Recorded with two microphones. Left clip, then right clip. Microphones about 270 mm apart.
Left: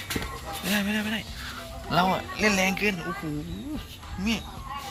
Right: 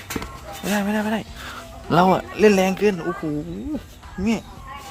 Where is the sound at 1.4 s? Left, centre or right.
Right.